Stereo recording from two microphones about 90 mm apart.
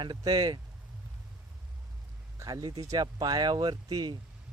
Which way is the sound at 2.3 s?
40° right (ahead or behind).